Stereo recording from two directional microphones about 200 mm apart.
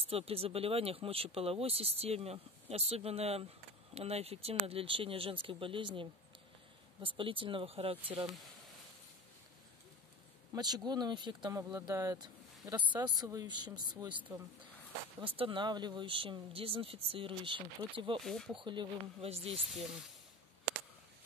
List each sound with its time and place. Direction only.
0.0 s speech: 30° right (ahead or behind)
10.5 s speech: 20° right (ahead or behind)
18.2 s speech: centre (ahead or behind)
18.6 s speech: 25° right (ahead or behind)
19.7 s speech: centre (ahead or behind)